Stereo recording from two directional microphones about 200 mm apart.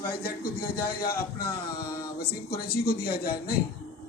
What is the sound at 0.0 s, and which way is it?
Speech, 50° left (ahead or behind).